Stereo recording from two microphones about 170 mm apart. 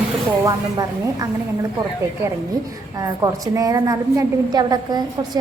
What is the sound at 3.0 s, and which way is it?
A woman's voice, 20° right (ahead or behind).